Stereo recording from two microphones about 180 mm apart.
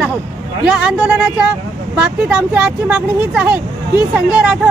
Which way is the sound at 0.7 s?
5° right (ahead or behind).